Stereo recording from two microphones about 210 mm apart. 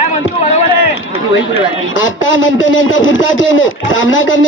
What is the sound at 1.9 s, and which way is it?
Speech, 65° left (ahead or behind).